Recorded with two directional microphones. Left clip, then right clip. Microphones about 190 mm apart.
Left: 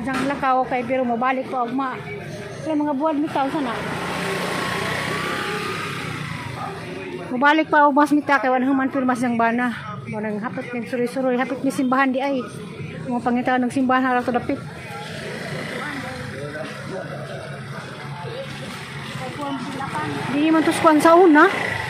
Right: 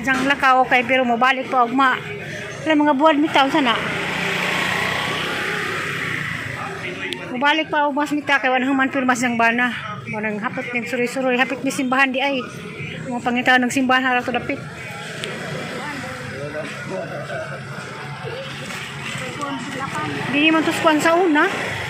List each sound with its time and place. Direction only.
0.0 s speech: centre (ahead or behind)
2.8 s speech: 25° right (ahead or behind)
3.1 s speech: 10° right (ahead or behind)
7.3 s speech: 25° left (ahead or behind)
8.3 s a man's voice: 20° left (ahead or behind)
20.3 s a man's voice: 15° left (ahead or behind)
20.8 s speech: 25° left (ahead or behind)